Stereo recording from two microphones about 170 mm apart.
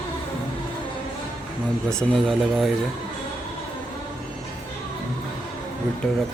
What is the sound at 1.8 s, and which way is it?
Speech, 5° left (ahead or behind).